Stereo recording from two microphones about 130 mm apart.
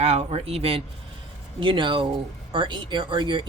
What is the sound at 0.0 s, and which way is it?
Speech, 60° right (ahead or behind).